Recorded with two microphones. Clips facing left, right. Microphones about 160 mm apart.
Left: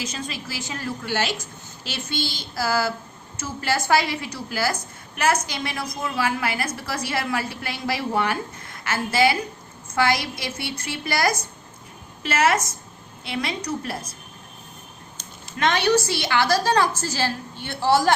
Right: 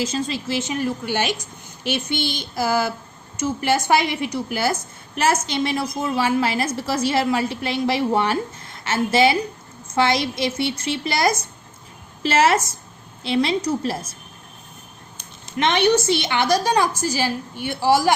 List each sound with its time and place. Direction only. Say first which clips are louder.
0.0 s a woman's voice: right 7 dB; 30° right (ahead or behind)
15.5 s a woman's voice: right 2 dB; 20° right (ahead or behind)